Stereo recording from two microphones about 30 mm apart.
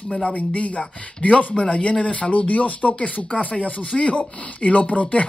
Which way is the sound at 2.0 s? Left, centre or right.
Left.